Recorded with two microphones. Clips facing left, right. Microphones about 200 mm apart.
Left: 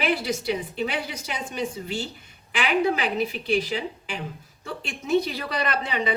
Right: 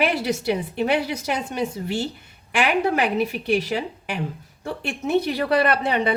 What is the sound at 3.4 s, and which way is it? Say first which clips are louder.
A woman's voice: right 2 dB; 65° right (ahead or behind).